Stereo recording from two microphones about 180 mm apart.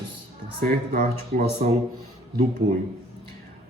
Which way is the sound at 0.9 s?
55° right (ahead or behind).